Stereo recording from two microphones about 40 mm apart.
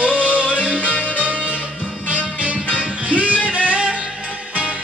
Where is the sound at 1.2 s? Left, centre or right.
Right.